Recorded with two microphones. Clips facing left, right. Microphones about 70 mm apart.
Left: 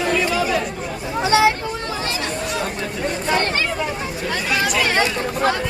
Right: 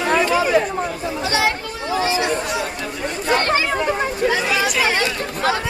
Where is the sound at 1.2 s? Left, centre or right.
Left.